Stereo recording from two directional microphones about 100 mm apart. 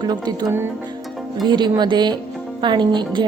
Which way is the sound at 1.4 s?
50° right (ahead or behind).